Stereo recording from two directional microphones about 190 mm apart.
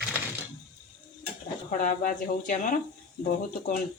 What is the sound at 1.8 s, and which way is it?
Speech, 40° left (ahead or behind).